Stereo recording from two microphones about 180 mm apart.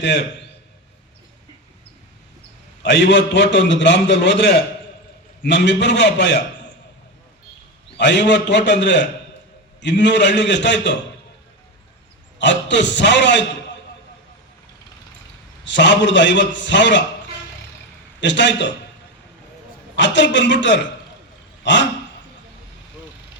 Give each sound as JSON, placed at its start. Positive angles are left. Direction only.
{"t": 0.0, "sound": "a man's voice", "side_deg": 75}
{"t": 2.8, "sound": "a man's voice", "side_deg": 75}
{"t": 7.9, "sound": "a man's voice", "side_deg": 75}
{"t": 12.4, "sound": "a man's voice", "side_deg": 80}
{"t": 15.6, "sound": "a man's voice", "side_deg": 80}
{"t": 18.2, "sound": "a man's voice", "side_deg": 80}
{"t": 20.0, "sound": "a man's voice", "side_deg": 80}
{"t": 21.6, "sound": "dog", "side_deg": 80}